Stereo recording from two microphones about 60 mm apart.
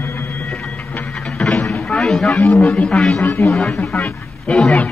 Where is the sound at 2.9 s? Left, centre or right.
Centre.